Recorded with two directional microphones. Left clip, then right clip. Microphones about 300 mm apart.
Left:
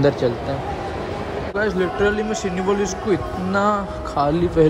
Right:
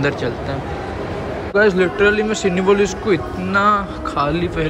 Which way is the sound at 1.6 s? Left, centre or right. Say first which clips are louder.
Right 6 dB; centre.